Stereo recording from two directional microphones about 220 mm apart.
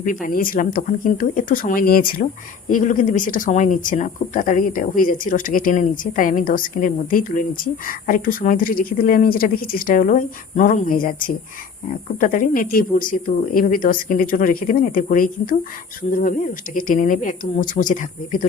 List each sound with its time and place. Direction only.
0.0 s speech: 40° left (ahead or behind)